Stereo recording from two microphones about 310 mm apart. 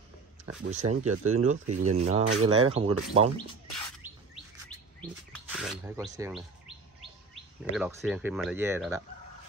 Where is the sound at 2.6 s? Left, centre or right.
Centre.